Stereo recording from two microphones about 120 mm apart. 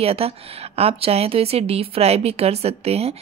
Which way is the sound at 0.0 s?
55° right (ahead or behind).